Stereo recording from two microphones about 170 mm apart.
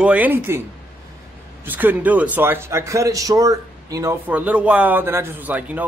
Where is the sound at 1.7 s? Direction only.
10° right (ahead or behind).